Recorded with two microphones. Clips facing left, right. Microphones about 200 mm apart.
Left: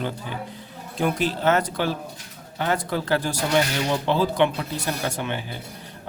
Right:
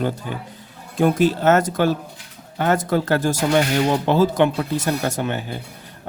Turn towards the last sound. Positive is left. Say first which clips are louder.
# right 4 dB
turn(degrees=-45)  # may be behind; listen again after turning